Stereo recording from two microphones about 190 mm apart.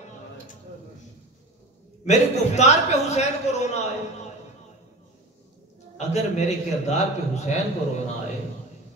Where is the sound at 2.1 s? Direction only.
35° left (ahead or behind).